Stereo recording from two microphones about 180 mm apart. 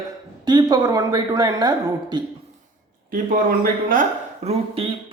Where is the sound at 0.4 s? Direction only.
25° right (ahead or behind).